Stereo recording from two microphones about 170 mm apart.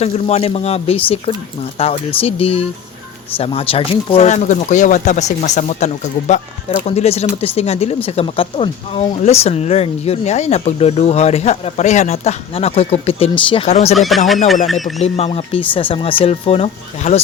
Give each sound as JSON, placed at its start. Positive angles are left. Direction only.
{"t": 0.0, "sound": "speech", "side_deg": 35}
{"t": 13.7, "sound": "speech", "side_deg": 40}
{"t": 13.9, "sound": "speech", "side_deg": 0}
{"t": 15.0, "sound": "speech", "side_deg": 35}